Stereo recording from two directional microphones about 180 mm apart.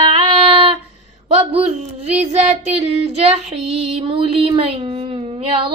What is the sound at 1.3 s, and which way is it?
Speech, 35° right (ahead or behind).